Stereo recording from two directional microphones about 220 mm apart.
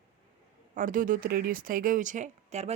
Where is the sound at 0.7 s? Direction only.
35° right (ahead or behind).